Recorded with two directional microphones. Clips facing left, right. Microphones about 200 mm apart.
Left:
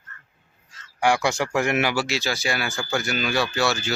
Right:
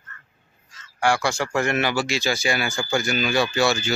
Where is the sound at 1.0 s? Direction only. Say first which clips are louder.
Left 1 dB; 20° left (ahead or behind).